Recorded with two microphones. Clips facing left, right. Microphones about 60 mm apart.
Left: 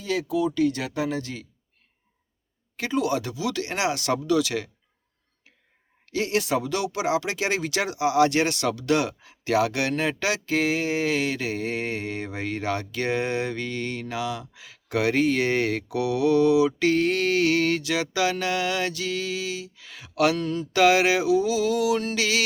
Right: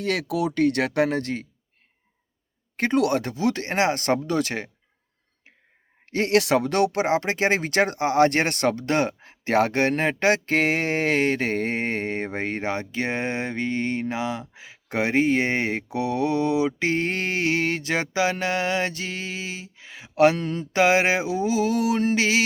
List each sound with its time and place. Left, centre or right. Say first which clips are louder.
0.0 s speech: even; right
2.7 s speech: right 4 dB; right
6.1 s speech: right 4 dB; right